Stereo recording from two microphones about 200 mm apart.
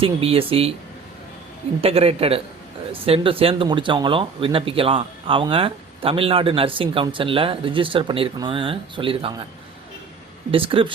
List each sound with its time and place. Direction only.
0.0 s speech: 25° right (ahead or behind)
1.8 s speech: 30° right (ahead or behind)
10.5 s speech: 25° right (ahead or behind)